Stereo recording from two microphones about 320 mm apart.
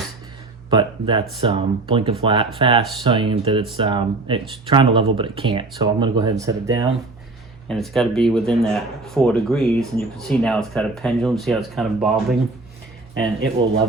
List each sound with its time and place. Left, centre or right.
0.7 s speech: centre
7.7 s speech: centre